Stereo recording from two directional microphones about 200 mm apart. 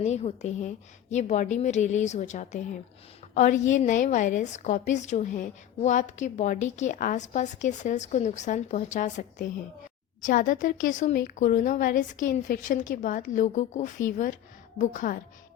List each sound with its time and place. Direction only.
0.0 s a woman's voice: 35° left (ahead or behind)